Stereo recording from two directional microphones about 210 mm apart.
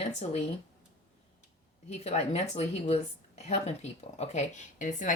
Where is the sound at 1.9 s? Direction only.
30° left (ahead or behind).